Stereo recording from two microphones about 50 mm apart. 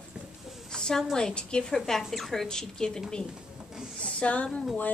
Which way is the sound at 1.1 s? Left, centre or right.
Centre.